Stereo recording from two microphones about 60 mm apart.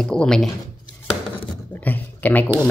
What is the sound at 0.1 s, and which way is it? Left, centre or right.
Speech, centre.